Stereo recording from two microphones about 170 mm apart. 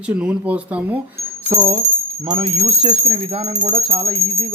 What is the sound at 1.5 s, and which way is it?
Speech, 20° right (ahead or behind).